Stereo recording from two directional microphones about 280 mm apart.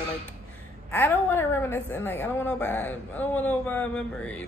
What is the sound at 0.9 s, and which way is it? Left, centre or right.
A woman's voice, centre.